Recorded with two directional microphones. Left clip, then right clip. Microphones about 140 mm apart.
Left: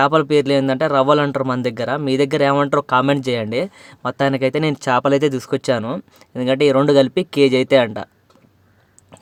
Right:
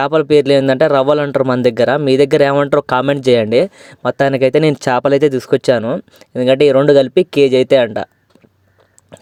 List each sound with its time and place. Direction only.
0.0 s speech: 35° right (ahead or behind)